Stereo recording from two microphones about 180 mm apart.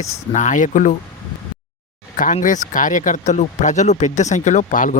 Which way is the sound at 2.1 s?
45° left (ahead or behind).